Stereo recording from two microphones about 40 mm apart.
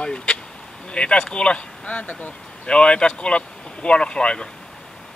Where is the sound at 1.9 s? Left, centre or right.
Left.